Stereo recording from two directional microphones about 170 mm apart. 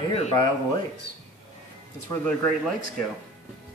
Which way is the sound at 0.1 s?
35° left (ahead or behind).